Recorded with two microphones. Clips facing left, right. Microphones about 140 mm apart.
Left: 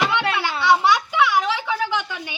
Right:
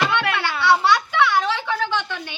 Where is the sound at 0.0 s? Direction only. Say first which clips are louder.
Even; 15° left (ahead or behind).